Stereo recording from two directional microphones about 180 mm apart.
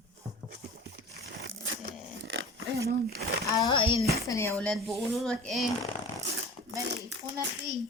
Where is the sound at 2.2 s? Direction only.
90° right.